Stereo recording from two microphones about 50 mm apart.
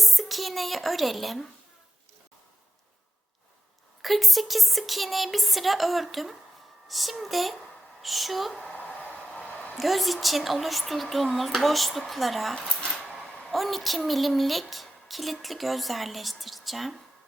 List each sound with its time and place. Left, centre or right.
0.0 s a woman's voice: centre
4.0 s a woman's voice: centre
9.7 s a woman's voice: centre
12.5 s speech: centre
12.9 s speech: centre